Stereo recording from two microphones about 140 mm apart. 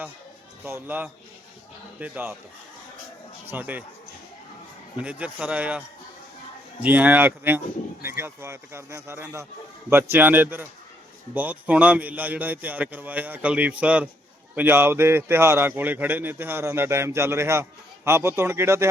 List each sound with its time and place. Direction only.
0.6 s a man's voice: 15° right (ahead or behind)
3.5 s a man's voice: 10° right (ahead or behind)
4.9 s a man's voice: 10° right (ahead or behind)
6.8 s a man's voice: 10° right (ahead or behind)